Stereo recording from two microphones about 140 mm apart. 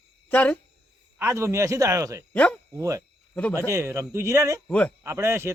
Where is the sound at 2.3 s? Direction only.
10° left (ahead or behind).